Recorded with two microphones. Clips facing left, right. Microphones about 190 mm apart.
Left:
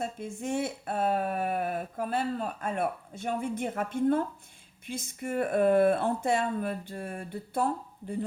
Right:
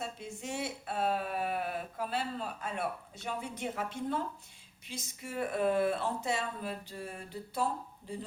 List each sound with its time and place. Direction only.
0.0 s speech: 50° left (ahead or behind)